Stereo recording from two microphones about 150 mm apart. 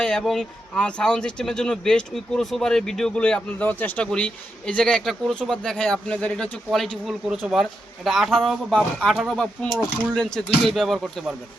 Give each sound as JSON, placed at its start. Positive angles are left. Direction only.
{"t": 0.0, "sound": "speech", "side_deg": 5}